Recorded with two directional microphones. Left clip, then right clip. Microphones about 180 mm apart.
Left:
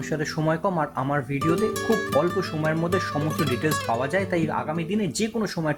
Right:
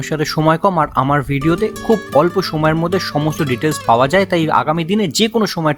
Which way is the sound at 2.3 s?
30° right (ahead or behind).